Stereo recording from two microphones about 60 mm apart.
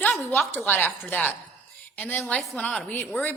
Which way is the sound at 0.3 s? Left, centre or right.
Left.